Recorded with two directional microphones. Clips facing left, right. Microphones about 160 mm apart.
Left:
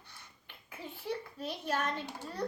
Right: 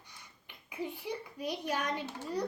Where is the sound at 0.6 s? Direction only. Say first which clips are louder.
Right 1 dB; 15° right (ahead or behind).